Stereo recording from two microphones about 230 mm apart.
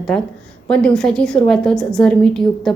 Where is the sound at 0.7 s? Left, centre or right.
Centre.